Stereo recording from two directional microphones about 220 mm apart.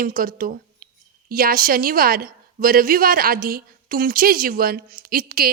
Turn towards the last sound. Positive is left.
turn(degrees=-40)  # may be behind; listen again after turning